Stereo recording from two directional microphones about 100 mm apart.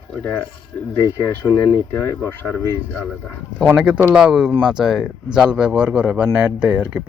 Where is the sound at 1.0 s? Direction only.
35° left (ahead or behind).